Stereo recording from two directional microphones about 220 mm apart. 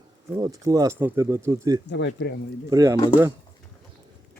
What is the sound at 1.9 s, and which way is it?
Speech, 55° left (ahead or behind).